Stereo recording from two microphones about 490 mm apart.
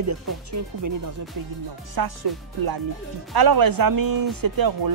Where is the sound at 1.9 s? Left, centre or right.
Right.